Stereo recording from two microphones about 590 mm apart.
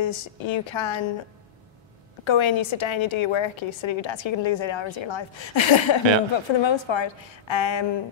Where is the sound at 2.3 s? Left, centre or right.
Left.